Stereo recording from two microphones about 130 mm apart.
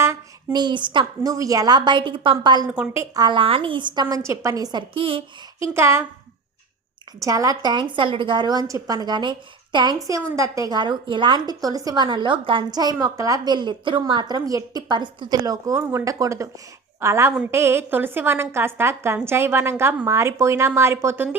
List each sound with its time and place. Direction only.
0.5 s a woman's voice: 35° right (ahead or behind)
2.7 s a woman's voice: 15° right (ahead or behind)
3.2 s a woman's voice: 40° right (ahead or behind)
4.1 s a woman's voice: 25° right (ahead or behind); by 5.2 s 40° right (ahead or behind)
5.7 s a woman's voice: 20° right (ahead or behind)
7.2 s a woman's voice: 25° right (ahead or behind)